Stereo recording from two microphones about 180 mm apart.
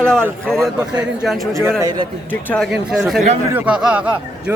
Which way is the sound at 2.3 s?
10° left (ahead or behind).